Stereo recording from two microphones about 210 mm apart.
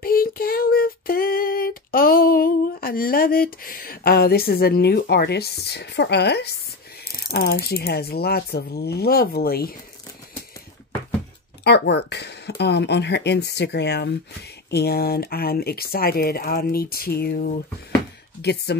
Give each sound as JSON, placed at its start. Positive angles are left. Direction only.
{"t": 0.0, "sound": "child singing", "side_deg": 45}
{"t": 7.2, "sound": "speech", "side_deg": 45}
{"t": 11.6, "sound": "speech", "side_deg": 50}